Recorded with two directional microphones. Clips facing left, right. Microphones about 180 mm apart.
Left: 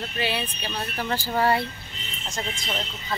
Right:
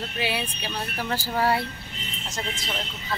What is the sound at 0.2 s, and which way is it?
Female singing, 10° right (ahead or behind).